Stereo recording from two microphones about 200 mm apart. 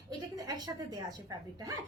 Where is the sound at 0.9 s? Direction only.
20° right (ahead or behind).